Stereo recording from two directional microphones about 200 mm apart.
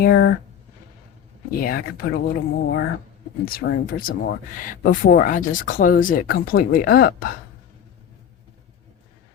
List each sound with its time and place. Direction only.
0.0 s speech: 60° left (ahead or behind)
1.5 s speech: 45° left (ahead or behind)